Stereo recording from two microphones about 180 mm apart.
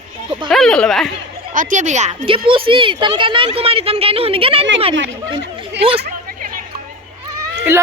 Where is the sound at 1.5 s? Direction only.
40° right (ahead or behind).